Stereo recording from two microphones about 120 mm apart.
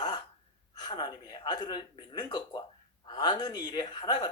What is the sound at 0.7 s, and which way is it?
Speech, 35° left (ahead or behind).